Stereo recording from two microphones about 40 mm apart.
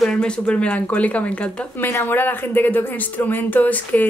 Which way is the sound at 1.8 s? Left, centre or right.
Left.